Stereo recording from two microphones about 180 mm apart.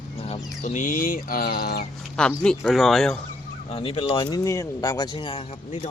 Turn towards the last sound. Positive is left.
turn(degrees=35)  # may be behind; listen again after turning